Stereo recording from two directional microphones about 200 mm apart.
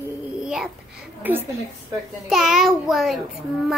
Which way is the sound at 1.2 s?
10° right (ahead or behind).